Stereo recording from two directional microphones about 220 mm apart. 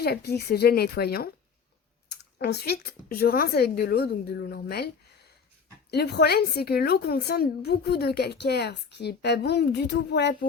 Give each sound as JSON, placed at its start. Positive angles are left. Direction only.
{"t": 0.0, "sound": "a woman's voice", "side_deg": 45}
{"t": 5.9, "sound": "a woman's voice", "side_deg": 50}